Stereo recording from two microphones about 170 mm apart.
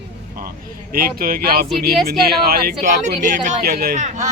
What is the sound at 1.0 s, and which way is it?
A man's voice, 60° right (ahead or behind).